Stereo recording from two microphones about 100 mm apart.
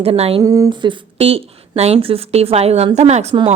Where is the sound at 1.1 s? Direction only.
80° right.